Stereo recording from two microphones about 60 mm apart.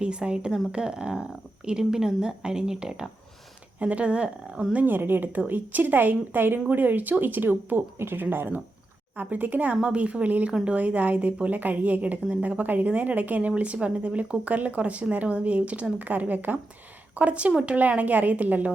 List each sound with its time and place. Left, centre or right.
0.0 s speech: centre
3.8 s a woman's voice: right